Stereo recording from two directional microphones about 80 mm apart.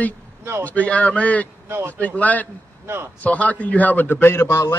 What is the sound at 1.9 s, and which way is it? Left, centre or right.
A man's voice, centre.